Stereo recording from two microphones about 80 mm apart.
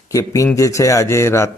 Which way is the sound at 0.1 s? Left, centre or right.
Left.